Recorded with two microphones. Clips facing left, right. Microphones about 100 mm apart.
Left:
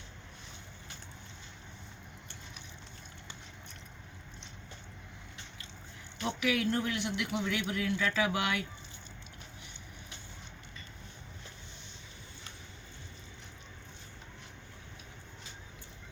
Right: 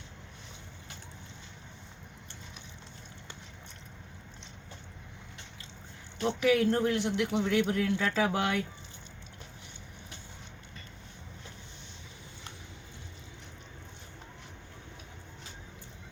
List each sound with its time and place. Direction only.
6.1 s a man's voice: 35° right (ahead or behind)